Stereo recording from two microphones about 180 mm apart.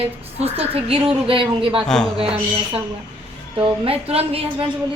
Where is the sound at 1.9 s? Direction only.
5° left (ahead or behind).